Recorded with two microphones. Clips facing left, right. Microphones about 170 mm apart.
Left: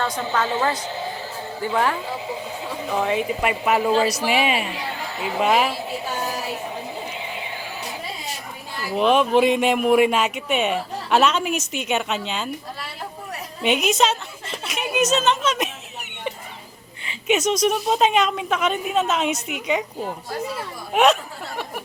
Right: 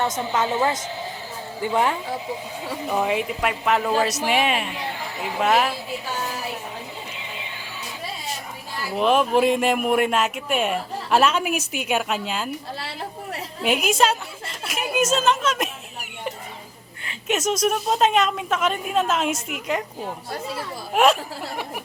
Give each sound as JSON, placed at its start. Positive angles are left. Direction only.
{"t": 0.3, "sound": "speech", "side_deg": -20}
{"t": 2.9, "sound": "speech", "side_deg": -5}
{"t": 9.0, "sound": "speech", "side_deg": 0}
{"t": 13.6, "sound": "speech", "side_deg": -5}
{"t": 14.0, "sound": "a sound", "side_deg": -5}
{"t": 15.1, "sound": "speech", "side_deg": -5}
{"t": 17.1, "sound": "speech", "side_deg": 0}
{"t": 20.9, "sound": "speech", "side_deg": 0}